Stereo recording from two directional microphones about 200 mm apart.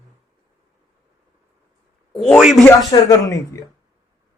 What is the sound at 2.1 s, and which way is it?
Speech, centre (ahead or behind).